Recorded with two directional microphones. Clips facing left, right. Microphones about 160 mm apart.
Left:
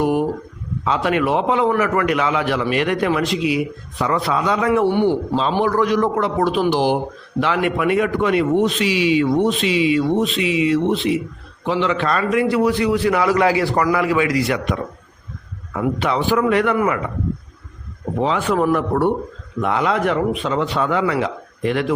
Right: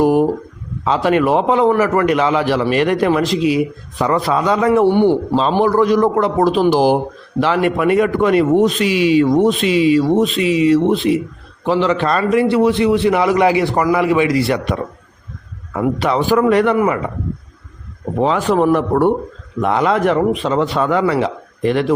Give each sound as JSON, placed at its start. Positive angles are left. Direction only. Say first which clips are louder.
{"t": 0.0, "sound": "a sound", "louder": "right 5 dB", "side_deg": -35}
{"t": 0.9, "sound": "a man's voice", "louder": "right 4 dB", "side_deg": -35}
{"t": 18.2, "sound": "a man's voice", "louder": "right 4 dB", "side_deg": -45}